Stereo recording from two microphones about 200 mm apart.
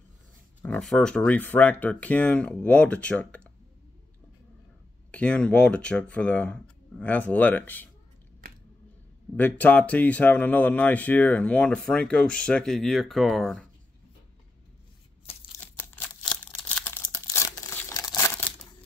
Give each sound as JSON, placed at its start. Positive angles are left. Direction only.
{"t": 0.6, "sound": "speech", "side_deg": 5}
{"t": 5.1, "sound": "speech", "side_deg": 5}
{"t": 9.4, "sound": "speech", "side_deg": 10}
{"t": 15.3, "sound": "crumpling", "side_deg": 30}
{"t": 15.6, "sound": "tearing", "side_deg": 10}